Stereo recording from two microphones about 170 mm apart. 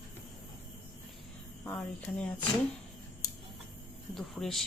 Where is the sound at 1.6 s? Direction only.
10° left (ahead or behind).